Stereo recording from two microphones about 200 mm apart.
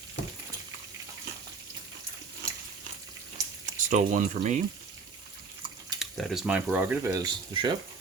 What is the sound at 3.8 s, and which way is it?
Speech, 40° right (ahead or behind).